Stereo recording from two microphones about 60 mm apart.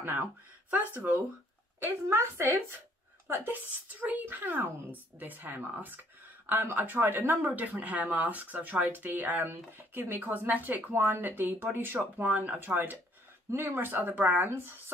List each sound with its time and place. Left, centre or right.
0.0 s a woman's voice: right
2.0 s a woman's voice: right
3.3 s a woman's voice: right
13.5 s a woman's voice: right